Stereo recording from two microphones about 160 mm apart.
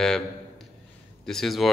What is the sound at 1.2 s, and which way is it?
Speech, centre (ahead or behind).